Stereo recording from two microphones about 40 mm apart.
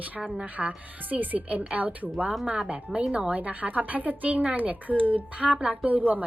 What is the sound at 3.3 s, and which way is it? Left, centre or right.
Speech, right.